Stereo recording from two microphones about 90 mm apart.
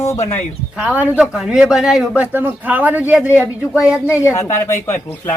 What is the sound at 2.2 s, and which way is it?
Speech, 20° right (ahead or behind).